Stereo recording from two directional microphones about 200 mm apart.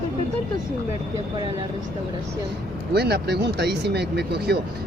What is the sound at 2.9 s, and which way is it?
Speech, 55° right (ahead or behind).